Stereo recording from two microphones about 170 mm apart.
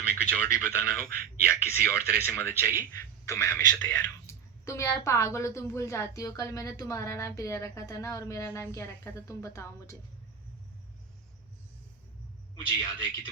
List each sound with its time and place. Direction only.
0.3 s a woman's voice: 10° left (ahead or behind)
12.5 s a man's voice: 20° left (ahead or behind)